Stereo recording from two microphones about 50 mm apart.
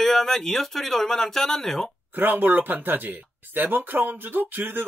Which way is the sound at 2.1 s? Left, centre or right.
Right.